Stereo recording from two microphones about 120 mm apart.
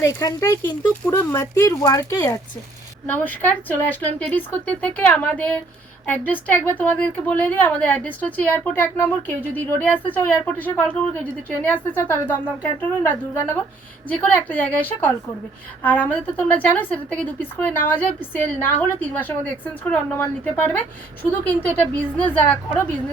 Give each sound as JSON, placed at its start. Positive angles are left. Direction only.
{"t": 0.0, "sound": "speech", "side_deg": 25}
{"t": 3.1, "sound": "a woman's voice", "side_deg": 15}